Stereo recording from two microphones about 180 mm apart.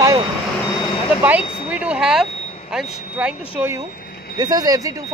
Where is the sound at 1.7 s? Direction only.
5° right (ahead or behind).